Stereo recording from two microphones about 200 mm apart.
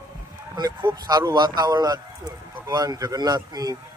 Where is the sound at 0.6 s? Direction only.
20° right (ahead or behind).